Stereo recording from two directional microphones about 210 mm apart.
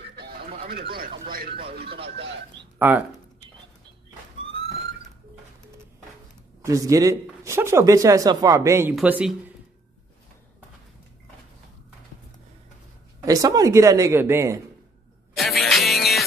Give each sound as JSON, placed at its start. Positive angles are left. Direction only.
{"t": 0.1, "sound": "chicken", "side_deg": -50}
{"t": 0.9, "sound": "speech", "side_deg": -45}
{"t": 2.8, "sound": "speech", "side_deg": -10}
{"t": 6.6, "sound": "speech", "side_deg": -15}
{"t": 13.2, "sound": "speech", "side_deg": -15}
{"t": 15.3, "sound": "music", "side_deg": 0}